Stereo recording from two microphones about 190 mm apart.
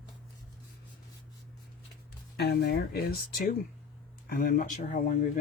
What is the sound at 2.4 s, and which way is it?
Speech, 55° left (ahead or behind).